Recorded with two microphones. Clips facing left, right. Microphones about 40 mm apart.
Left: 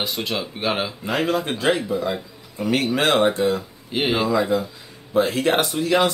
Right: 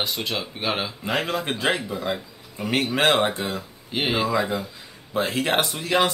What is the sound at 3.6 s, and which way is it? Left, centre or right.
Speech, centre.